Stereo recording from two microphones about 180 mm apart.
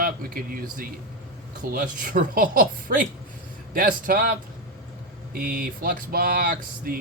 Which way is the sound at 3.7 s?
55° right (ahead or behind).